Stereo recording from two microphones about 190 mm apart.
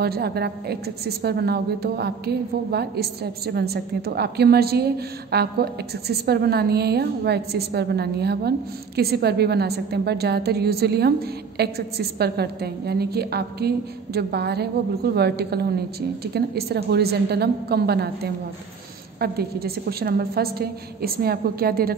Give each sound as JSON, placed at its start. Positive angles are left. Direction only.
{"t": 0.0, "sound": "a woman's voice", "side_deg": -55}